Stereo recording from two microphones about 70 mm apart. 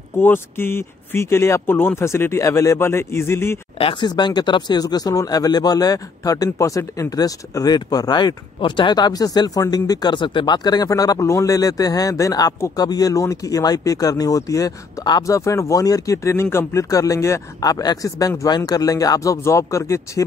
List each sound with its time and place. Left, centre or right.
0.2 s speech: left
2.8 s speech: left
4.0 s speech: left
7.2 s speech: left
10.9 s speech: left
17.6 s speech: left